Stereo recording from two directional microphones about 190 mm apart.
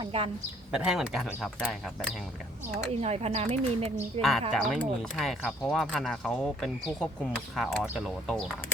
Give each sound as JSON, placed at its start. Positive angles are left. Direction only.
{"t": 0.0, "sound": "speech", "side_deg": -30}
{"t": 0.7, "sound": "speech", "side_deg": -5}
{"t": 2.9, "sound": "speech", "side_deg": -35}
{"t": 4.2, "sound": "speech", "side_deg": 0}